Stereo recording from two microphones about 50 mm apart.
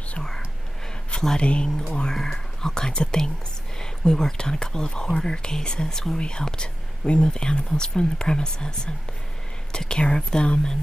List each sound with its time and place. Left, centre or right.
1.1 s speech: centre